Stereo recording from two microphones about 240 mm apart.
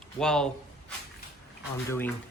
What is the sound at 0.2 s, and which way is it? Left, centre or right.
Speech, centre.